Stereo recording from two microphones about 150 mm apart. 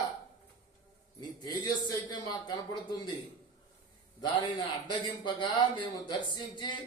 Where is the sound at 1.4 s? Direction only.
30° left (ahead or behind).